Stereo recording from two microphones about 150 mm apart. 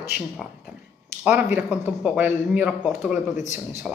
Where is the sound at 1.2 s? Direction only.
15° right (ahead or behind).